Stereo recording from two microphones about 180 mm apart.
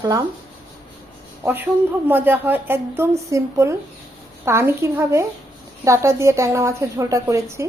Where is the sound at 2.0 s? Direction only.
10° right (ahead or behind).